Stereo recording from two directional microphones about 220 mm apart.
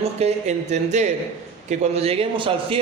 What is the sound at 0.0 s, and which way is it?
A man's voice, 30° right (ahead or behind).